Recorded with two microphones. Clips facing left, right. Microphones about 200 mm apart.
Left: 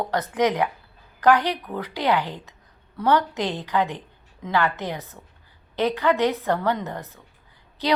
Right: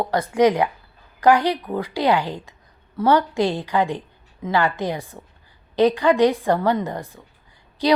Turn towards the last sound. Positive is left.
turn(degrees=-15)  # may be behind; listen again after turning